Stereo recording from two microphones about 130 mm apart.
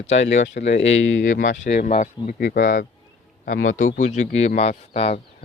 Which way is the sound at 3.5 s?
75° left (ahead or behind).